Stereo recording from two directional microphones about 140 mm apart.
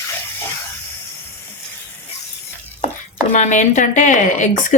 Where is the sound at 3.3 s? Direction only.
60° left (ahead or behind).